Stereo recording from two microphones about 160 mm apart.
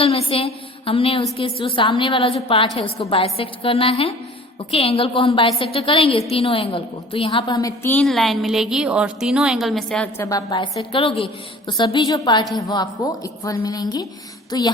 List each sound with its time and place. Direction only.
0.0 s a woman's voice: 35° left (ahead or behind); by 8.0 s 15° left (ahead or behind)
8.0 s a woman's voice: centre (ahead or behind)
10.2 s a woman's voice: 20° left (ahead or behind)
10.8 s a woman's voice: 35° left (ahead or behind)